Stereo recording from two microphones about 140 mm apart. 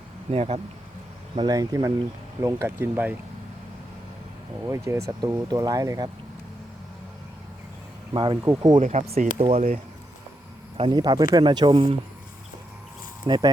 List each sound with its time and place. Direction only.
0.3 s speech: 45° right (ahead or behind)
1.4 s speech: 25° right (ahead or behind)
4.6 s speech: 20° right (ahead or behind)
8.1 s speech: 35° right (ahead or behind)
8.4 s speech: 20° right (ahead or behind)
8.8 s speech: 55° right (ahead or behind)
10.8 s speech: 35° right (ahead or behind)
13.2 s speech: 30° right (ahead or behind)